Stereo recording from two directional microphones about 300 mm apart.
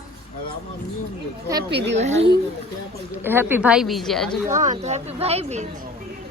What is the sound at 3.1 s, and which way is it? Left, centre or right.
Speech, centre.